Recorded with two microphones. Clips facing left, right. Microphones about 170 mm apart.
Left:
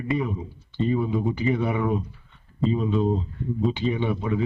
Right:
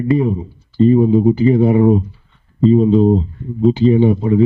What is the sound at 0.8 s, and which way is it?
A man's voice, 35° right (ahead or behind).